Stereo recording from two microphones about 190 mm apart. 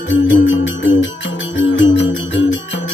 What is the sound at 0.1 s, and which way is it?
Music, 80° left.